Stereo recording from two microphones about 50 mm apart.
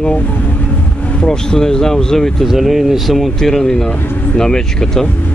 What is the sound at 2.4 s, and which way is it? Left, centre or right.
Speech, centre.